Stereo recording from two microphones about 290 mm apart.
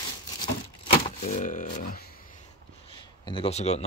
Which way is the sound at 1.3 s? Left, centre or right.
Left.